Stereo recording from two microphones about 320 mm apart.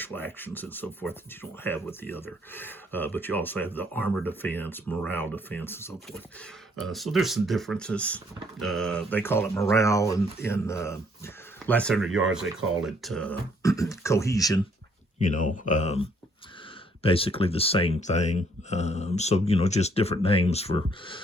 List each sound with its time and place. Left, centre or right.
0.0 s speech: centre
15.2 s speech: left